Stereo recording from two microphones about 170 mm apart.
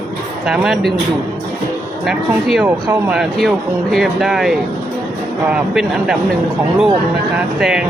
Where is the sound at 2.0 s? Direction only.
Centre (ahead or behind).